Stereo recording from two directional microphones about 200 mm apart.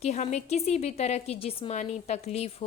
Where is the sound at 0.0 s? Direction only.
35° left (ahead or behind).